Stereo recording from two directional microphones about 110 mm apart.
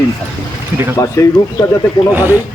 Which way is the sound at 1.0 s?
30° left (ahead or behind).